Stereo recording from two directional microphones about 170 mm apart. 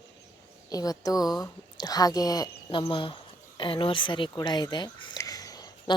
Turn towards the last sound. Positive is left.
turn(degrees=20)  # may be behind; listen again after turning